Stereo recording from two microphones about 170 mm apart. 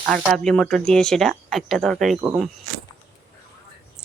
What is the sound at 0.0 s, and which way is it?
Speech, 5° right (ahead or behind).